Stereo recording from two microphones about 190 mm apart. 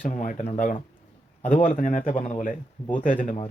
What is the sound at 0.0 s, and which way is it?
A man's voice, 40° left (ahead or behind).